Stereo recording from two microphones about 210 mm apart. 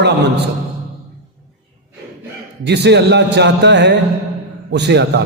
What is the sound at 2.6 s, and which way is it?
A man's voice, 55° right (ahead or behind).